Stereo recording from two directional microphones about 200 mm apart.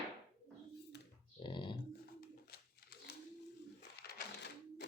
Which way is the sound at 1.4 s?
25° left (ahead or behind).